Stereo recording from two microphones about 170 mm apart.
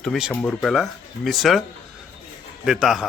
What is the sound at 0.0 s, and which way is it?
A man's voice, centre (ahead or behind).